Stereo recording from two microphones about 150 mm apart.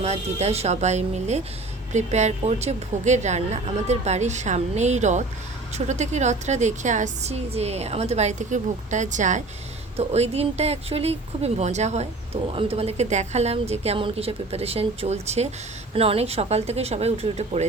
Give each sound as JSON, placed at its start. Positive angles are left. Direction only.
{"t": 0.0, "sound": "speech", "side_deg": -45}